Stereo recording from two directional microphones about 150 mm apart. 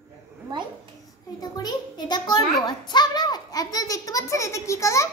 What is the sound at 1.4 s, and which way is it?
A child's voice, 25° left (ahead or behind).